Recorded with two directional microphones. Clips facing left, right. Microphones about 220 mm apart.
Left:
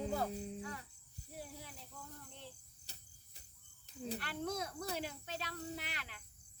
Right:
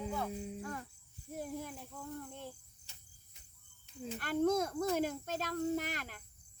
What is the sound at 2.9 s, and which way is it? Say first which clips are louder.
Cricket: left 3 dB; 40° left (ahead or behind).